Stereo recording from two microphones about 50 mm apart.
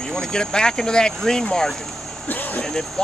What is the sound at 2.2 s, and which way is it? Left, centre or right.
Vehicle, left.